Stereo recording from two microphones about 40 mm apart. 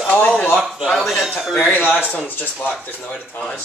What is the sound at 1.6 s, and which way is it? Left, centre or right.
Speech, left.